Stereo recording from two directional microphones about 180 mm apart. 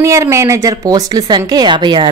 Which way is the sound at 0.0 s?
15° right (ahead or behind).